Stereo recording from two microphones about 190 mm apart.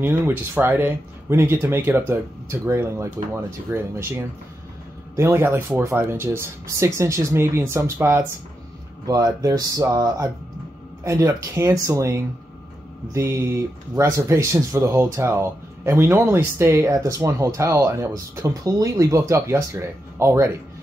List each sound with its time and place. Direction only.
0.0 s speech: 10° right (ahead or behind)